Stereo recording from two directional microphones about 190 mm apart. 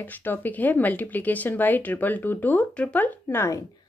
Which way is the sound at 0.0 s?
10° left (ahead or behind).